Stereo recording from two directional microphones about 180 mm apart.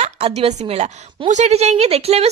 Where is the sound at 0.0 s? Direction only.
35° right (ahead or behind).